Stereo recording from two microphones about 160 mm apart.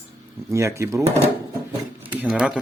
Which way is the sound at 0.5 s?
20° right (ahead or behind).